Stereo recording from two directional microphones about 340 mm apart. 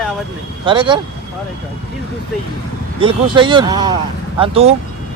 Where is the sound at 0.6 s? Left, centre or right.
Centre.